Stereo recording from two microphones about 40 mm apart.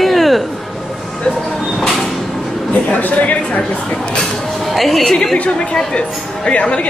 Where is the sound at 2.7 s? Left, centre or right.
Left.